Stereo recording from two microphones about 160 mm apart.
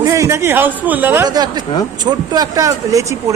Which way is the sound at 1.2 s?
25° right (ahead or behind).